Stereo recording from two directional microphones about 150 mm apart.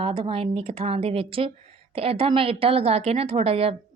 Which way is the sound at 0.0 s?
35° right (ahead or behind).